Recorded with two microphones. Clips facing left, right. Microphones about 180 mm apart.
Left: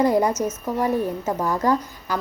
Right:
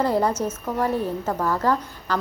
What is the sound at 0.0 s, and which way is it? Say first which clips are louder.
A woman's voice: left 2 dB; 15° left (ahead or behind).